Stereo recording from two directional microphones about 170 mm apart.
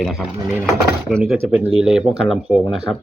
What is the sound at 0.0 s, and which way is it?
Speech, centre (ahead or behind).